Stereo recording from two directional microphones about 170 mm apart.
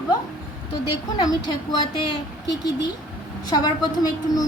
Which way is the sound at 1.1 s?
25° left (ahead or behind).